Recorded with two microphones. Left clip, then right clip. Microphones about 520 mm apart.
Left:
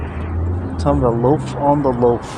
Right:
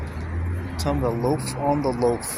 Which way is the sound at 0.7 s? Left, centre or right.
Right.